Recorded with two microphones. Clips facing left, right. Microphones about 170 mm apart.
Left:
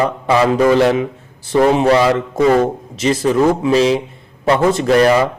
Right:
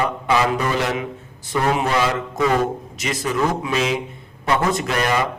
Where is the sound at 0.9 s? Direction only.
30° left (ahead or behind).